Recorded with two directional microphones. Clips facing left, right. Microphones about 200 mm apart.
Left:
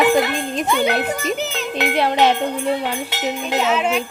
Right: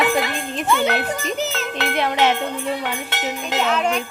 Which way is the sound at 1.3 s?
Centre (ahead or behind).